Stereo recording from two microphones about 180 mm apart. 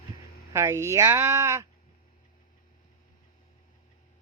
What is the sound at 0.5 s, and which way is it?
Speech, 15° right (ahead or behind).